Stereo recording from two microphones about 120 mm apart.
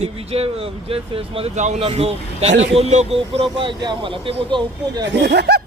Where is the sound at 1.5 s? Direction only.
75° right (ahead or behind).